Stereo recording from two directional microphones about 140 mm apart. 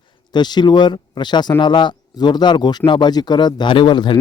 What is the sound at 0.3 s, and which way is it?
Speech, 30° left (ahead or behind).